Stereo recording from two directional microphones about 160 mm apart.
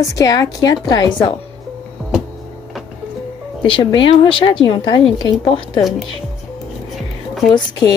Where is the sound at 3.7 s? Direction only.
35° left (ahead or behind).